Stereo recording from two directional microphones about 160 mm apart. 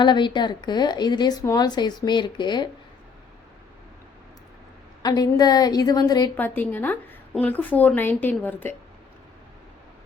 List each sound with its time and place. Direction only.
0.0 s speech: 30° left (ahead or behind)
5.0 s speech: 25° left (ahead or behind)
6.3 s a woman's voice: 10° left (ahead or behind)